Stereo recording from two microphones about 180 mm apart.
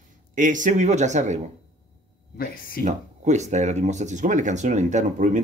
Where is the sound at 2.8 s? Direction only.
40° right (ahead or behind).